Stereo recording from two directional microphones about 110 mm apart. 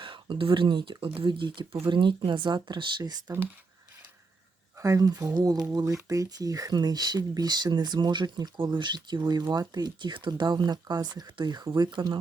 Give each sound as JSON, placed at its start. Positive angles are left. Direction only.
{"t": 0.0, "sound": "speech", "side_deg": -50}
{"t": 4.8, "sound": "speech", "side_deg": -30}